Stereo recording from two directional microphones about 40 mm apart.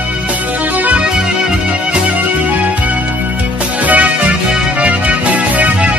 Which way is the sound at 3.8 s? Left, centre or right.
Right.